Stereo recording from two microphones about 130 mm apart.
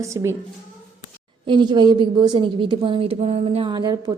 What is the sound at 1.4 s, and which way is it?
A woman's voice, 35° right (ahead or behind).